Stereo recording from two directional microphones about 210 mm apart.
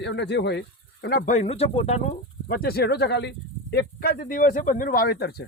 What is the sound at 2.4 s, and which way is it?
A man's voice, 45° left (ahead or behind).